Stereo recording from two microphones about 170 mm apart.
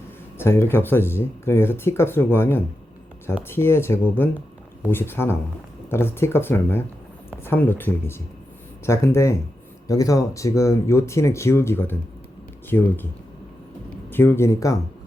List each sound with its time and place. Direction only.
0.3 s speech: 15° left (ahead or behind)
14.1 s speech: 15° left (ahead or behind)